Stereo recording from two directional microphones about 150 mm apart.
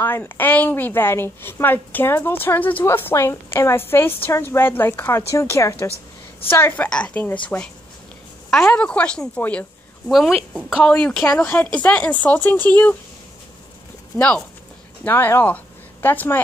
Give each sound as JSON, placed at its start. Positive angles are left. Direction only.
{"t": 0.0, "sound": "a woman's voice", "side_deg": 15}
{"t": 14.1, "sound": "a woman's voice", "side_deg": 10}